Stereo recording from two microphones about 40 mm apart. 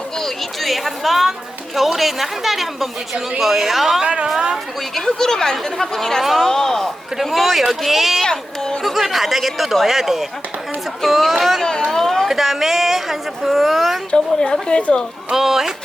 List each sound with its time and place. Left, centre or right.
0.6 s speech: centre
4.0 s a woman's voice: right
4.9 s speech: centre
6.2 s speech: centre
6.5 s speech: centre
7.3 s speech: centre
8.2 s speech: centre
8.8 s speech: centre
11.6 s speech: centre
12.3 s speech: centre
14.1 s a woman's voice: centre
15.3 s speech: centre